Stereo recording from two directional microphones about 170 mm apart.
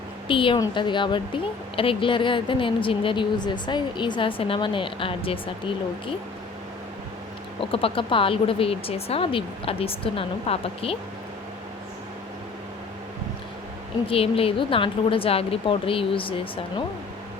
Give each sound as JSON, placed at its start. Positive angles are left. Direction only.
{"t": 0.3, "sound": "a woman's voice", "side_deg": 30}
{"t": 7.6, "sound": "speech", "side_deg": 35}
{"t": 14.1, "sound": "speech", "side_deg": 35}